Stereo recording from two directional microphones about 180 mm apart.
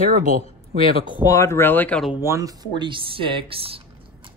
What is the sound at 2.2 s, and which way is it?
Speech, 20° right (ahead or behind).